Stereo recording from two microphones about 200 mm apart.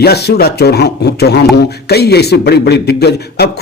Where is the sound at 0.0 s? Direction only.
55° left (ahead or behind).